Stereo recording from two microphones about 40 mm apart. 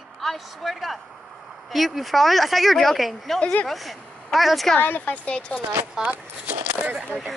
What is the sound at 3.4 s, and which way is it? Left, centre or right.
Speech, left.